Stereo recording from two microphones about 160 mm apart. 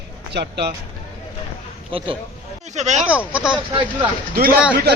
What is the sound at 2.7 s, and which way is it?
Speech, 45° right (ahead or behind).